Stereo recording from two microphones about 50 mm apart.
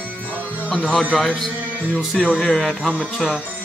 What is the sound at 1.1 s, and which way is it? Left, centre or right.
A man's voice, centre.